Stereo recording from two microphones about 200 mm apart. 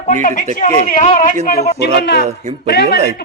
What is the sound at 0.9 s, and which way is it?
Speech, 40° left (ahead or behind).